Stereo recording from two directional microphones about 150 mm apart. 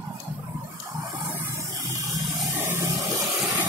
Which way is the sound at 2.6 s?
15° right (ahead or behind).